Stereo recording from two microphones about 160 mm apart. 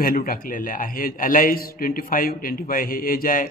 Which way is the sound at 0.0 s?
65° left (ahead or behind).